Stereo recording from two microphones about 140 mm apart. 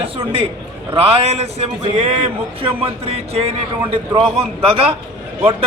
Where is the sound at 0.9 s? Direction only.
45° right (ahead or behind).